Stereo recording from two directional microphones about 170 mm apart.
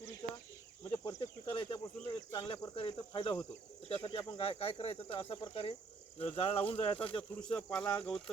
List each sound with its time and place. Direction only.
1.0 s cricket: 25° left (ahead or behind)
2.3 s speech: 30° left (ahead or behind)
7.8 s speech: 10° left (ahead or behind)